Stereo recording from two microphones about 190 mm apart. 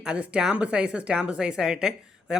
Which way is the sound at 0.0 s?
5° right (ahead or behind).